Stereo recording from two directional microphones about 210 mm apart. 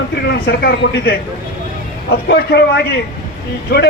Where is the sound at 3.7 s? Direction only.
50° left (ahead or behind).